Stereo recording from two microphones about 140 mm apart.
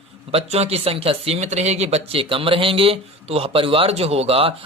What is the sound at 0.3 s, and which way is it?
Speech, 50° right (ahead or behind).